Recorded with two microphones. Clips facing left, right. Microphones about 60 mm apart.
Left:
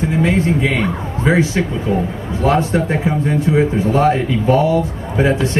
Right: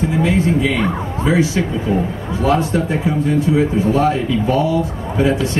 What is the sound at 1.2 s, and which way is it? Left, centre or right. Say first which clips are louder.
Speech: left 1 dB; left.